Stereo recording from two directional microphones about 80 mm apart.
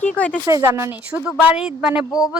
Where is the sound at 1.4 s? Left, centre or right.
Centre.